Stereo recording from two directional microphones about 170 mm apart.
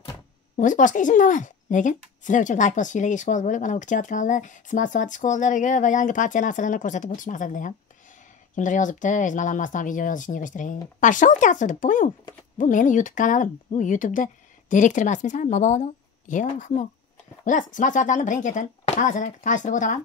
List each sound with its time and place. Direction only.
0.6 s speech: 50° left (ahead or behind)